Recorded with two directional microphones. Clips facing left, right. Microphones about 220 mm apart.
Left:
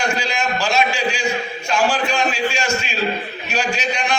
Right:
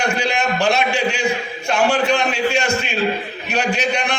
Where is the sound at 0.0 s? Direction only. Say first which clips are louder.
Right 2 dB; 60° right (ahead or behind).